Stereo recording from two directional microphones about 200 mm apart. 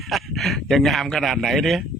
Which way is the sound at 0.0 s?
Centre (ahead or behind).